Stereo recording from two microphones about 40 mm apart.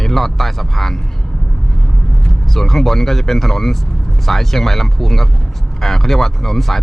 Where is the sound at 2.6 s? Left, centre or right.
Centre.